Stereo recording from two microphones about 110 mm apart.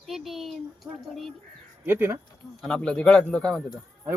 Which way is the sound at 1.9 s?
20° right (ahead or behind).